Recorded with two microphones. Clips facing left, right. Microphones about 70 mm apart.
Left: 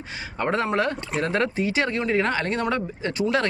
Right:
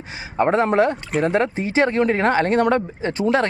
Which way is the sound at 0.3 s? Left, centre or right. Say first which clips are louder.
Right 7 dB; right.